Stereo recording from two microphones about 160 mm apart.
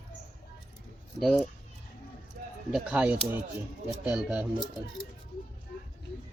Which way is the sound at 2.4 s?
65° right (ahead or behind).